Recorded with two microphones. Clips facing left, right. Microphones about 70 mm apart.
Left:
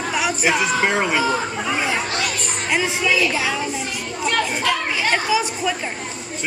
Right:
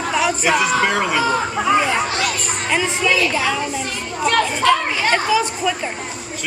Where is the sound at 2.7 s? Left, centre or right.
Centre.